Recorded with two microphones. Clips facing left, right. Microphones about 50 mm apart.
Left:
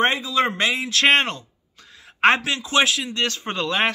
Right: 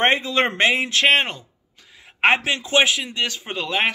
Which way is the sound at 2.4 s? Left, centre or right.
Right.